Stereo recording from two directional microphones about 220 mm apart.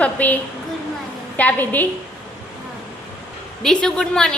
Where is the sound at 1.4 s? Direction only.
5° left (ahead or behind).